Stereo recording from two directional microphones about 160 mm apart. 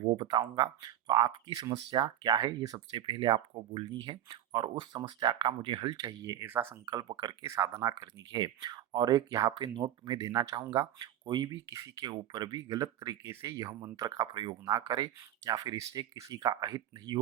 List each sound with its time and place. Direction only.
0.0 s speech: 35° right (ahead or behind); by 6.9 s 15° right (ahead or behind)
6.9 s speech: 25° right (ahead or behind)